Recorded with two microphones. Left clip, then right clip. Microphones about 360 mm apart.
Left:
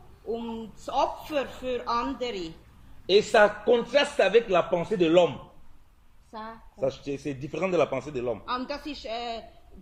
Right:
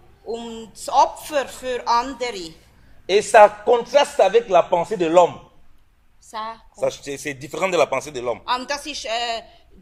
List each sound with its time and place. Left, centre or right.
0.9 s speech: centre
6.7 s a man's voice: right